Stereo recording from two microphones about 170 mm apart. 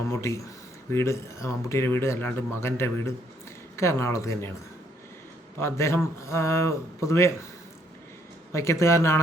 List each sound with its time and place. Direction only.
0.1 s speech: 15° left (ahead or behind)
5.5 s speech: 15° left (ahead or behind)
8.5 s speech: 15° left (ahead or behind)